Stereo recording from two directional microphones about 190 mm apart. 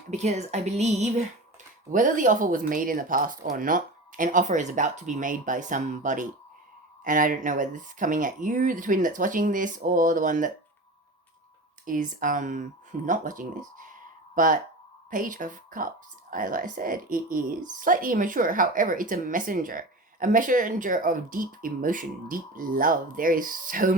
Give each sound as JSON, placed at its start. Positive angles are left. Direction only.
{"t": 0.1, "sound": "speech", "side_deg": -35}
{"t": 11.9, "sound": "speech", "side_deg": -45}